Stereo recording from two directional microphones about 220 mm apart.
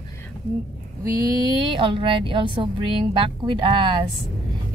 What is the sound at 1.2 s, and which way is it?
A woman's voice, 20° right (ahead or behind).